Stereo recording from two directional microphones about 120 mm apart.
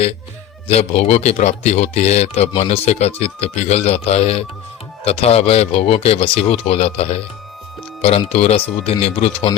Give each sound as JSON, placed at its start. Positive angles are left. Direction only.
{"t": 0.7, "sound": "speech", "side_deg": 60}
{"t": 8.2, "sound": "speech", "side_deg": 60}